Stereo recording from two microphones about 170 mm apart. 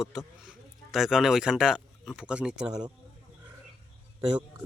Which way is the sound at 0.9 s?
Centre (ahead or behind).